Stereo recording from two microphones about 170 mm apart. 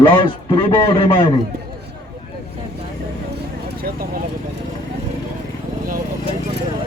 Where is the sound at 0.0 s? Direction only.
30° left (ahead or behind).